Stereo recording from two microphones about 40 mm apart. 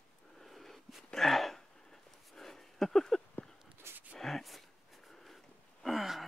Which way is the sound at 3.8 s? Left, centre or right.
Right.